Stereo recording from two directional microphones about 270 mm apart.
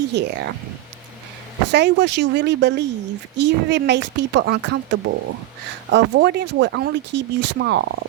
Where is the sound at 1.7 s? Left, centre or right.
Right.